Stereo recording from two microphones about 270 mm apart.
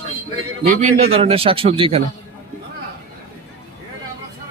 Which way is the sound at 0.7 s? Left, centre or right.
Right.